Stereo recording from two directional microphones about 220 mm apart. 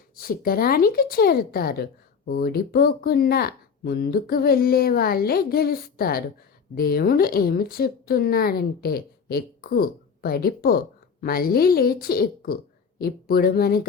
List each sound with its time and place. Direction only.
0.2 s speech: 40° left (ahead or behind)